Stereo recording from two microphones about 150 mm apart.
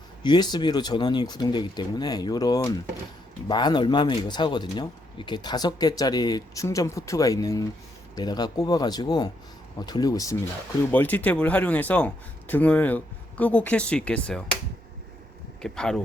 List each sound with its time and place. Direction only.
0.2 s speech: 30° left (ahead or behind)
10.9 s speech: 10° left (ahead or behind)
15.6 s speech: 5° left (ahead or behind)